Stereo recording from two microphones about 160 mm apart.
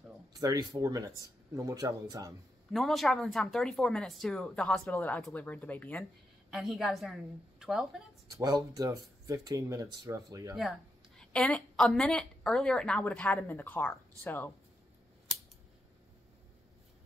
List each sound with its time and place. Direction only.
0.3 s speech: 25° right (ahead or behind)
2.7 s speech: centre (ahead or behind)
8.3 s speech: 20° right (ahead or behind)
11.1 s speech: 5° left (ahead or behind)